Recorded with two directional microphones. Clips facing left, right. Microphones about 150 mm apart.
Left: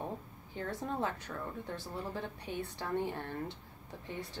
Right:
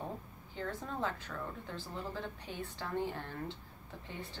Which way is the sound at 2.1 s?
15° left (ahead or behind).